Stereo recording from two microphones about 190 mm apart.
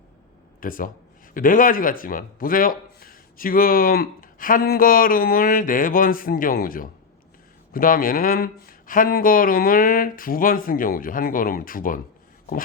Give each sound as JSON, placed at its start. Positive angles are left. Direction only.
{"t": 0.6, "sound": "a man's voice", "side_deg": 45}